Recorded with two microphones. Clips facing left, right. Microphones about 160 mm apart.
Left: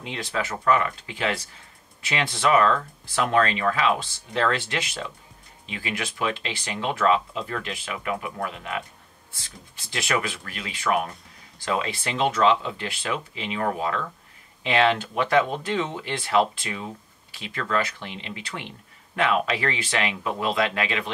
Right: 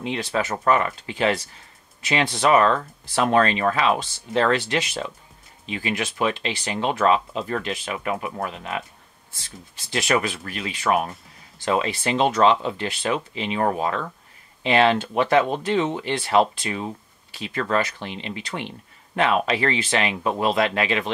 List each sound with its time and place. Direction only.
0.0 s speech: 30° right (ahead or behind)
10.0 s speech: 30° right (ahead or behind)